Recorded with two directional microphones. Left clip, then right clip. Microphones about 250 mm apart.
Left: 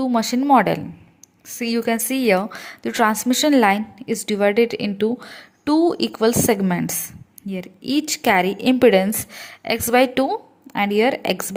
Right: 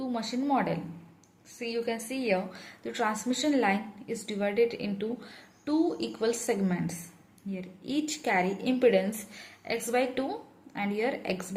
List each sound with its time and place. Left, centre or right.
0.1 s a woman's voice: left